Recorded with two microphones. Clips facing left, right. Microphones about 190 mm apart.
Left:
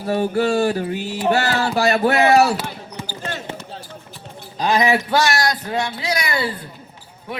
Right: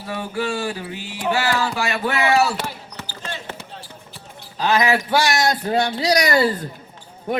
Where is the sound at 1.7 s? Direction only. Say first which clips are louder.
Left 6 dB; 40° left (ahead or behind).